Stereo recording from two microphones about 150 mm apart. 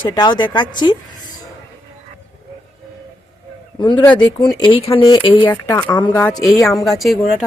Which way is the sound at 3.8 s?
30° left (ahead or behind).